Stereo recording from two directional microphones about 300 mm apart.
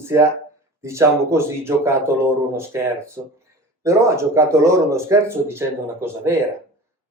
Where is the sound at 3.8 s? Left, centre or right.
Centre.